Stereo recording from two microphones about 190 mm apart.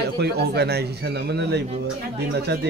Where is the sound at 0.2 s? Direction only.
55° right (ahead or behind).